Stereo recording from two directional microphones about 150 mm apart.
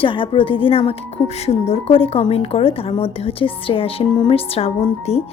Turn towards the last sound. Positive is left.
turn(degrees=45)  # may be behind; listen again after turning